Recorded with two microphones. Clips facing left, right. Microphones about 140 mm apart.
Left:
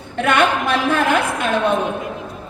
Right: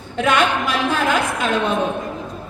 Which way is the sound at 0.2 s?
60° left (ahead or behind).